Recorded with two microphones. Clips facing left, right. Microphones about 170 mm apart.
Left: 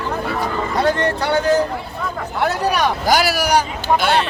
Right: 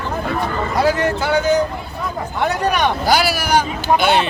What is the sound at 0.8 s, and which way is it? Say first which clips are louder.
Speech: right 1 dB; 5° right (ahead or behind).